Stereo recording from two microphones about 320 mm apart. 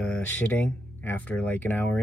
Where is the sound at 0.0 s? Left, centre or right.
Centre.